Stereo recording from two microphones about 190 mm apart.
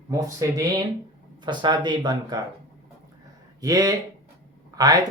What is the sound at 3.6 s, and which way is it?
Speech, 20° right (ahead or behind).